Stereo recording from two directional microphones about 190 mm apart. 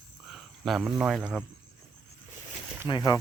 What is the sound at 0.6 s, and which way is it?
Speech, centre (ahead or behind).